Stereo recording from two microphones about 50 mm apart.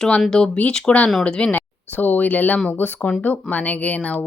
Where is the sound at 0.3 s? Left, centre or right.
Centre.